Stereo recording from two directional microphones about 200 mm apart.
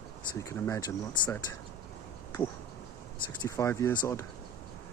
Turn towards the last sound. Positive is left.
turn(degrees=15)  # may be behind; listen again after turning